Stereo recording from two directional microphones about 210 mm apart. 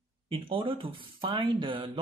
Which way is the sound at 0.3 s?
25° right (ahead or behind).